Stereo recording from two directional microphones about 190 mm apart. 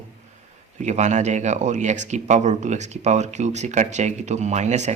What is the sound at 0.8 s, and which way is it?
Speech, 40° right (ahead or behind).